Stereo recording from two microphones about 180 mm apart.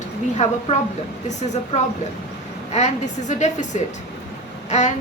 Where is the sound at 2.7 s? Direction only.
40° left (ahead or behind).